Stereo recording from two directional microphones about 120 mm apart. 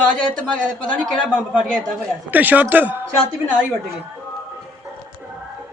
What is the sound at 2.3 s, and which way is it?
Speech, 15° right (ahead or behind).